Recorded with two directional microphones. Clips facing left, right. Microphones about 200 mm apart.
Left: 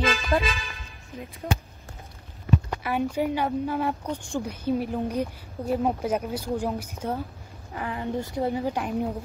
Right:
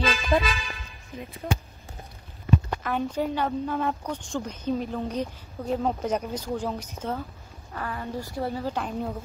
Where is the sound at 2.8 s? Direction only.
10° left (ahead or behind).